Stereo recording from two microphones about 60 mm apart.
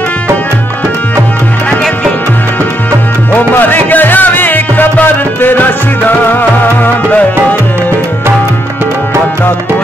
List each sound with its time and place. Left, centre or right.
3.5 s music: left